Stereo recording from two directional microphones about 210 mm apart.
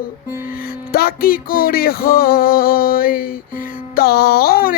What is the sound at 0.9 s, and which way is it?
Music, 45° left (ahead or behind).